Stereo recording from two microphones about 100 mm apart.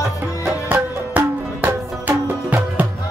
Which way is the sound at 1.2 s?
15° right (ahead or behind).